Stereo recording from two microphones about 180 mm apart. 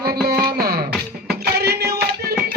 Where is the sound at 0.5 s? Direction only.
60° right (ahead or behind).